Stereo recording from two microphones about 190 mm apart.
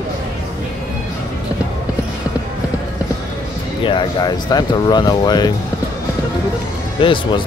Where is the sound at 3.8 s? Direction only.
25° left (ahead or behind).